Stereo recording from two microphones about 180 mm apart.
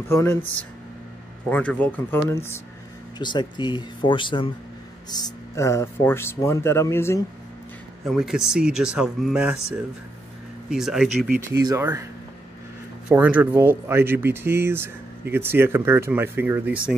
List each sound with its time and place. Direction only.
0.1 s speech: 15° left (ahead or behind)
1.5 s speech: 10° left (ahead or behind)
3.2 s speech: 25° left (ahead or behind)
5.1 s speech: 15° left (ahead or behind)
8.0 s speech: centre (ahead or behind)
10.7 s speech: centre (ahead or behind)
11.6 s speech: 15° right (ahead or behind)
13.1 s speech: 10° right (ahead or behind)